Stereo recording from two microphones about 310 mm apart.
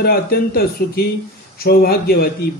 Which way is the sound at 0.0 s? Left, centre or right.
Left.